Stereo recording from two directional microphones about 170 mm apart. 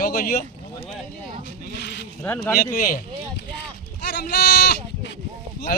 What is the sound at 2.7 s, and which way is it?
Speech, 55° left (ahead or behind).